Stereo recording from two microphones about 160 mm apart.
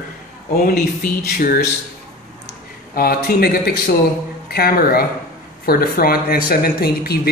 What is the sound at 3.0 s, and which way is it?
A woman's voice, 70° left (ahead or behind).